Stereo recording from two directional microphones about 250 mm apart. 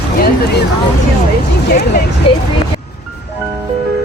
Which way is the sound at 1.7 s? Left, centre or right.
Left.